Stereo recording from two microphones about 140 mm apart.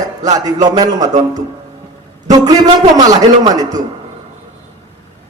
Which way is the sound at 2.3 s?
25° right (ahead or behind).